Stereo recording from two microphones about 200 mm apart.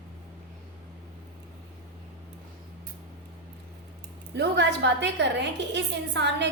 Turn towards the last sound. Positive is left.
turn(degrees=-60)  # may be behind; listen again after turning